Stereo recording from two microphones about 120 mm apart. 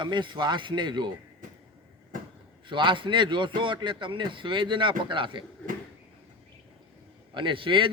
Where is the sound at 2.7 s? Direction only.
40° right (ahead or behind).